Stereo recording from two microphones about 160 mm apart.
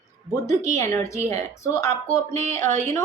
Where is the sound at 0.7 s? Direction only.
15° left (ahead or behind).